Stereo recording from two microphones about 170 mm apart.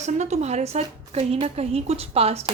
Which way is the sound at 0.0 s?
40° right (ahead or behind).